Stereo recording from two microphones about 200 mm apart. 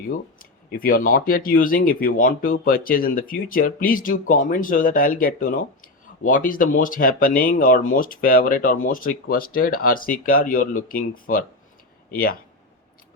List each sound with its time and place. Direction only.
0.1 s speech: 45° left (ahead or behind)